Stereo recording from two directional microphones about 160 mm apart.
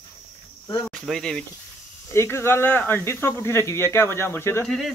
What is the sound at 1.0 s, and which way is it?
Speech, 5° left (ahead or behind).